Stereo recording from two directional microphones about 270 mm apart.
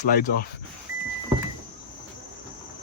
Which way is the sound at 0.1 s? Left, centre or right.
Left.